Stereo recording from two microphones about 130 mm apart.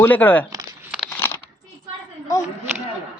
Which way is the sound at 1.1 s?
15° left (ahead or behind).